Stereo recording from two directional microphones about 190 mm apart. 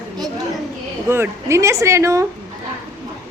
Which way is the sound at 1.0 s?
15° right (ahead or behind).